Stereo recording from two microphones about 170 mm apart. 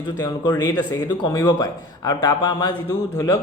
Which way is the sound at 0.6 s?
25° left (ahead or behind).